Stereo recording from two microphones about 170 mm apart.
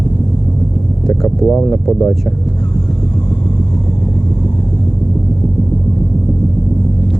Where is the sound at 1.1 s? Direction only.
10° left (ahead or behind).